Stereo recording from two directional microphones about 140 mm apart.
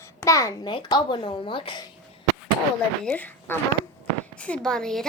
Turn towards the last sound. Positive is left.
turn(degrees=5)  # may be behind; listen again after turning